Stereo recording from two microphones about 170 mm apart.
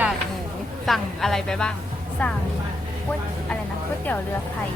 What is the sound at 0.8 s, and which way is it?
Speech, centre (ahead or behind).